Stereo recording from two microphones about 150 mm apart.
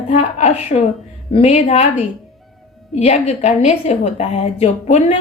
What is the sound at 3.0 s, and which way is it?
A woman's voice, 45° left (ahead or behind).